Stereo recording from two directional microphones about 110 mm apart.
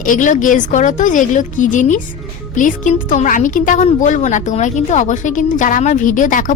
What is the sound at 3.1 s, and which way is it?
A woman's voice, 90° left.